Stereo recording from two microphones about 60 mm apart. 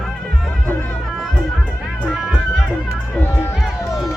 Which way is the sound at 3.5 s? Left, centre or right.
Centre.